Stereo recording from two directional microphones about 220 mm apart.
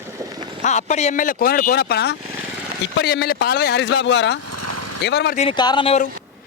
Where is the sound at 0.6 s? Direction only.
30° left (ahead or behind); by 5.3 s 50° left (ahead or behind).